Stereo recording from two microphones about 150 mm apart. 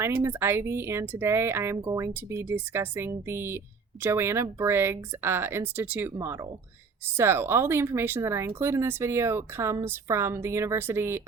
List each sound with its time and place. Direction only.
0.0 s speech: 15° right (ahead or behind)